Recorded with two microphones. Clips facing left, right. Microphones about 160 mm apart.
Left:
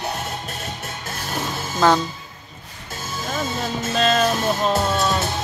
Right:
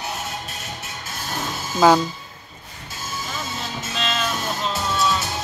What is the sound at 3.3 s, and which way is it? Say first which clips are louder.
Music: left 9 dB; 55° left (ahead or behind).